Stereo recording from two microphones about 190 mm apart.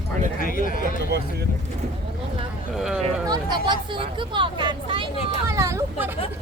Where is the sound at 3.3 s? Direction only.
20° right (ahead or behind).